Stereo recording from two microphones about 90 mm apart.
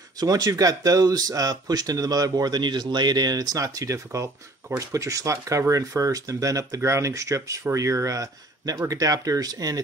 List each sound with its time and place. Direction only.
0.2 s speech: 45° right (ahead or behind)